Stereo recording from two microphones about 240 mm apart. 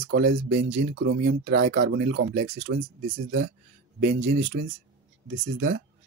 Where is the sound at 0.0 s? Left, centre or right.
Right.